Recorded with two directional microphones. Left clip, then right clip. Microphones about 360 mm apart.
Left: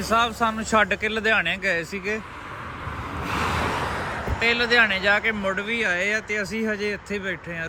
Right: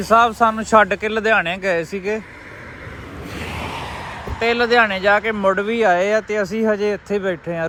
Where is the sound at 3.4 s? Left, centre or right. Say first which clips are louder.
Left 2 dB; left.